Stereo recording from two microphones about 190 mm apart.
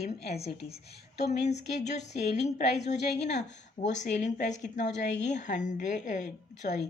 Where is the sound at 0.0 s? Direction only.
35° left (ahead or behind).